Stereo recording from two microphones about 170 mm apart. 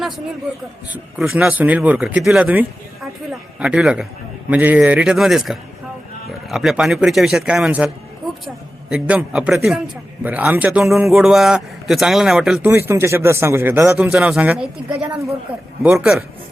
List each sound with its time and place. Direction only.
0.9 s a man's voice: 5° right (ahead or behind)
8.9 s a man's voice: 5° right (ahead or behind)
12.7 s a man's voice: 15° right (ahead or behind)